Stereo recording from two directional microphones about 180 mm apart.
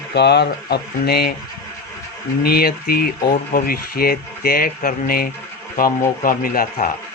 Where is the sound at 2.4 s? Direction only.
60° left (ahead or behind).